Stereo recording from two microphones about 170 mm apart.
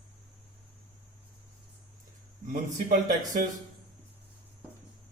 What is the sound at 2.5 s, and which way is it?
Speech, 50° right (ahead or behind).